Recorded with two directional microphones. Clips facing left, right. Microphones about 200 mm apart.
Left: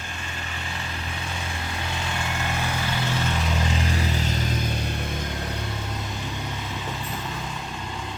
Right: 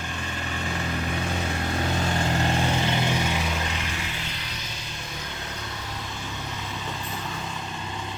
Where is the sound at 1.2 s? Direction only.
45° right (ahead or behind); by 3.2 s 20° right (ahead or behind).